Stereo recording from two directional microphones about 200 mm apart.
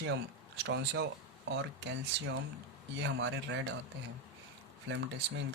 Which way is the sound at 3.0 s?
65° right (ahead or behind).